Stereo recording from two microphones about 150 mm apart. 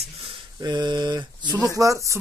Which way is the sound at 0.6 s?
30° right (ahead or behind).